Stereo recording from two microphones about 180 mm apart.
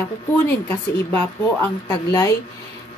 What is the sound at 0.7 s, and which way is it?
Speech, 10° left (ahead or behind).